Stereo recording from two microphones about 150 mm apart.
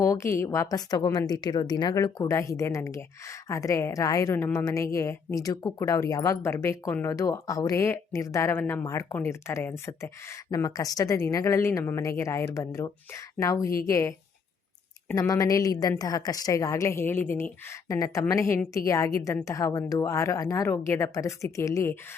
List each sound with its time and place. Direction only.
0.0 s speech: 20° left (ahead or behind)